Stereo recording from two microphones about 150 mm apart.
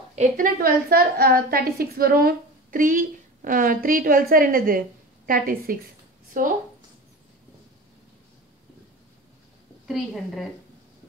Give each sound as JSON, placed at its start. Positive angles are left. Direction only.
{"t": 0.1, "sound": "a woman's voice", "side_deg": -55}
{"t": 0.6, "sound": "a woman's voice", "side_deg": -80}
{"t": 9.8, "sound": "a woman's voice", "side_deg": 0}